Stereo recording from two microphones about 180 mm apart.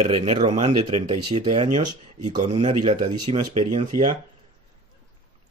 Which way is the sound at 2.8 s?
30° right (ahead or behind).